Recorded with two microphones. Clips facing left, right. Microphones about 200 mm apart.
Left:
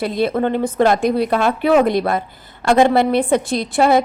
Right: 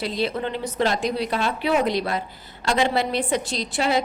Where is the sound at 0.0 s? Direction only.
55° left (ahead or behind).